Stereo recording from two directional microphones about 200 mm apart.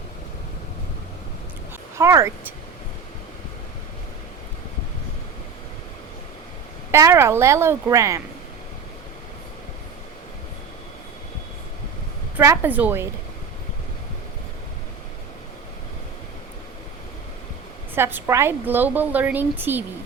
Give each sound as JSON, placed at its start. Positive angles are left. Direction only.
{"t": 2.0, "sound": "a woman's voice", "side_deg": -15}
{"t": 6.9, "sound": "a woman's voice", "side_deg": -15}
{"t": 12.4, "sound": "a woman's voice", "side_deg": -10}
{"t": 17.9, "sound": "a woman's voice", "side_deg": -10}